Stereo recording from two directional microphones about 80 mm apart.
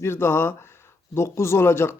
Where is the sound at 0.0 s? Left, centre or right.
Left.